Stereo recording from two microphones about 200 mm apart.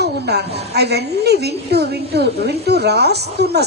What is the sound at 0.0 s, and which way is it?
A woman's voice, 55° right (ahead or behind).